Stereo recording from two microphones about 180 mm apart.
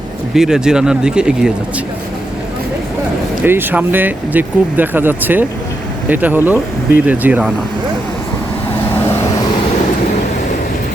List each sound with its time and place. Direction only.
0.3 s speech: 5° right (ahead or behind)
3.4 s speech: 10° right (ahead or behind)